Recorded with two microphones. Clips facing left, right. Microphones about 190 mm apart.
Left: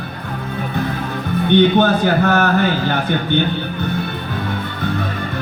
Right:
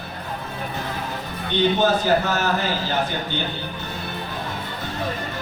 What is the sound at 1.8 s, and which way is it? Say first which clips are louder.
Speech: left 4 dB; 60° left (ahead or behind).